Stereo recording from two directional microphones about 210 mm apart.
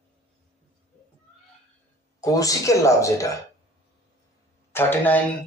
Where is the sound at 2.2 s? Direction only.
15° left (ahead or behind).